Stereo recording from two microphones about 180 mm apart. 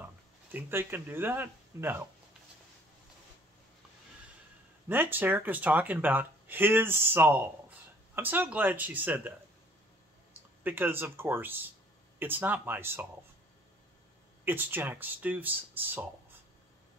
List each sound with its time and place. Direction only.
0.5 s speech: 10° right (ahead or behind)
4.8 s speech: 10° right (ahead or behind)
10.6 s speech: 10° right (ahead or behind)
14.4 s speech: 10° right (ahead or behind)